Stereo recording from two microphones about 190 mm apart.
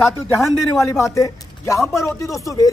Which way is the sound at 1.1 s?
15° left (ahead or behind).